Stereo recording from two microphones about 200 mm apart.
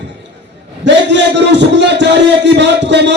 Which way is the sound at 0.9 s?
60° right (ahead or behind).